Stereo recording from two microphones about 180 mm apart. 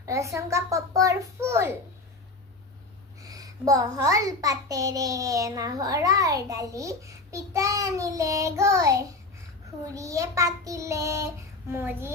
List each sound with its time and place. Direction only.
0.0 s a child's voice: 15° right (ahead or behind)
3.2 s a child's voice: 20° right (ahead or behind)